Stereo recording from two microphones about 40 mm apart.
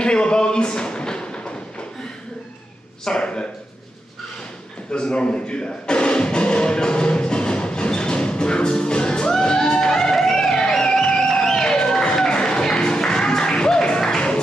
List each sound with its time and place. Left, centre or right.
0.0 s a sound: left
3.1 s speech: left
4.9 s music: left